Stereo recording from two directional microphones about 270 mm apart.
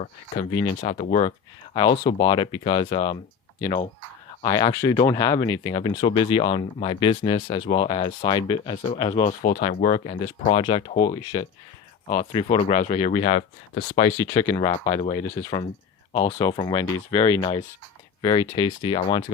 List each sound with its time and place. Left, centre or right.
0.8 s speech: left
4.4 s speech: centre
9.4 s speech: left
9.6 s speech: left